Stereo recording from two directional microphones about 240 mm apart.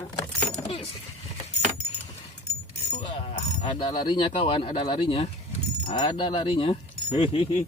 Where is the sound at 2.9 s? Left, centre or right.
Left.